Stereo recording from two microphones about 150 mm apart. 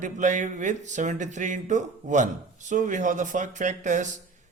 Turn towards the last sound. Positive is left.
turn(degrees=-55)  # may be behind; listen again after turning